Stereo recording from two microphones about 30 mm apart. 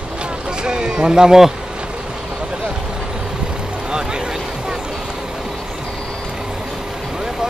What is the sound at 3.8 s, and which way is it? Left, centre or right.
Vehicle, right.